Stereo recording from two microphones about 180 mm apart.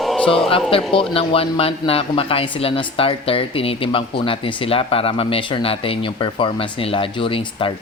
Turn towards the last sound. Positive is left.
turn(degrees=30)  # may be behind; listen again after turning